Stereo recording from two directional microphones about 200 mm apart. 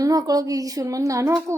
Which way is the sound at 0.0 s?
20° right (ahead or behind).